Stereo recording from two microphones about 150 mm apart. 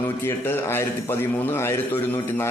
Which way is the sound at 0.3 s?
15° left (ahead or behind).